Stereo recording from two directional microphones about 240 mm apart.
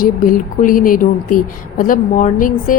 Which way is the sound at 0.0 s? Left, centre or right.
Left.